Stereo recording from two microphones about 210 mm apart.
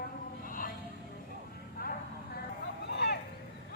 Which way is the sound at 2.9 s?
55° left (ahead or behind).